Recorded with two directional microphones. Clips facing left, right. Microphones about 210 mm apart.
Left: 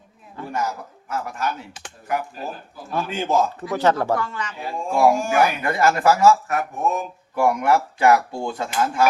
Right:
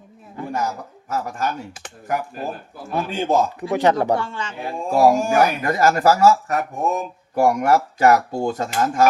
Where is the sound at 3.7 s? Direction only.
15° right (ahead or behind).